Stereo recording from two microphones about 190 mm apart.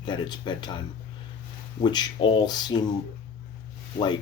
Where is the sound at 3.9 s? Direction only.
25° left (ahead or behind).